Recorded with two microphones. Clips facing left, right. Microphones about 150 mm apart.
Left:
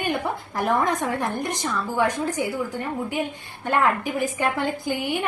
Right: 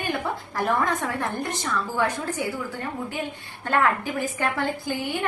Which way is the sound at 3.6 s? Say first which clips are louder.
Left 1 dB; 15° left (ahead or behind).